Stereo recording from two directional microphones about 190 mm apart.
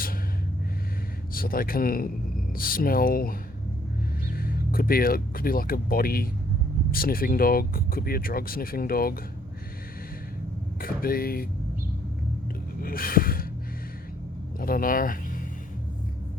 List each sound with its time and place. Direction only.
1.3 s speech: 50° left (ahead or behind)
10.8 s speech: 50° left (ahead or behind)
12.8 s gasp: 50° left (ahead or behind)
14.6 s speech: 50° left (ahead or behind)